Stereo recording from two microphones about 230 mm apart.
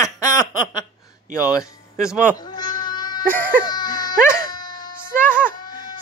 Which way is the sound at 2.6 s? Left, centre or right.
Centre.